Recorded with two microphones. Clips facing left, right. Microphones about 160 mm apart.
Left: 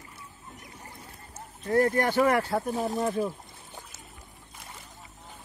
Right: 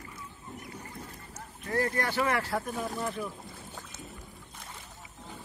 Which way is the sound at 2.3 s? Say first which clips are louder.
Left 5 dB; 25° left (ahead or behind).